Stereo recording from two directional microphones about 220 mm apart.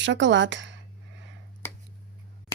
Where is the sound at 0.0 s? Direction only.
55° right (ahead or behind).